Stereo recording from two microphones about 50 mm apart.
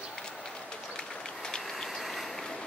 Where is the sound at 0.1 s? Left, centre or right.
Centre.